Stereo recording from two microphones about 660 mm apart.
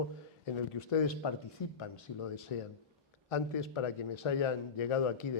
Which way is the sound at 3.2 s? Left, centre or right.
Left.